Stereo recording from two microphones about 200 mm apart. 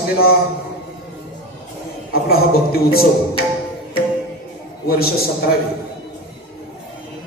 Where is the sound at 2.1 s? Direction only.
50° left (ahead or behind).